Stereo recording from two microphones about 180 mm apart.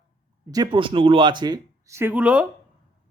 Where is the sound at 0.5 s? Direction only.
25° right (ahead or behind).